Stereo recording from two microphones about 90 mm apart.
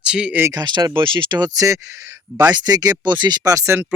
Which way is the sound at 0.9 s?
65° right (ahead or behind).